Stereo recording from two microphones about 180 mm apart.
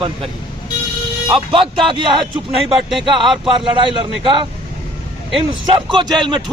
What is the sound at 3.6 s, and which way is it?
Speech, 25° right (ahead or behind).